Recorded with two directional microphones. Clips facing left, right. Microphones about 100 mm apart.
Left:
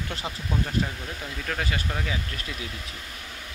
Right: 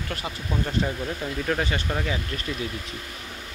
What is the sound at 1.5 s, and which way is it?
Speech, 5° right (ahead or behind).